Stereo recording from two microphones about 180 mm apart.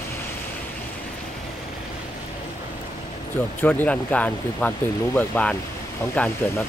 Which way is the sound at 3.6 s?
10° left (ahead or behind).